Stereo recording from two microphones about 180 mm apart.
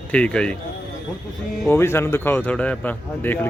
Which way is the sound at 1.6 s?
15° left (ahead or behind).